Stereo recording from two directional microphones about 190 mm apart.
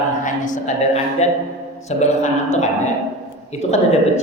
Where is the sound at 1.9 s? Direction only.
35° left (ahead or behind).